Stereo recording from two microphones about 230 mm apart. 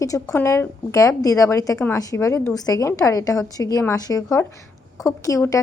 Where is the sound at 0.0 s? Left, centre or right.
Centre.